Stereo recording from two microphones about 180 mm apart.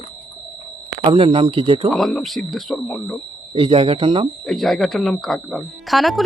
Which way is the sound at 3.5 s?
30° right (ahead or behind).